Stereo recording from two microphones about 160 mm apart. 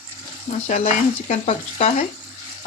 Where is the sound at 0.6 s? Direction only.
50° left (ahead or behind).